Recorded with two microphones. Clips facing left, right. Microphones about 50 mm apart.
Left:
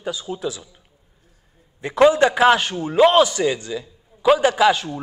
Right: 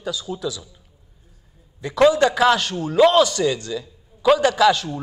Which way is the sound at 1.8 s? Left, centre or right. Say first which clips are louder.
Left 1 dB; left.